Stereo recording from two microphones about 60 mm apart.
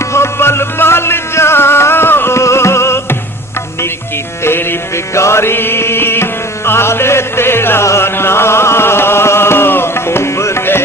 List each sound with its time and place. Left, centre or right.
0.0 s music: left
4.4 s music: left